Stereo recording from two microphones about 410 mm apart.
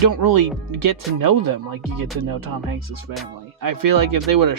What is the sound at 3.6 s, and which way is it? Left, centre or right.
Speech, right.